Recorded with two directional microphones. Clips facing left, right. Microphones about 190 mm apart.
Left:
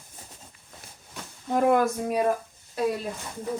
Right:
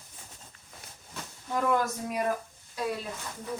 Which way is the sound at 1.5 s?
55° left (ahead or behind).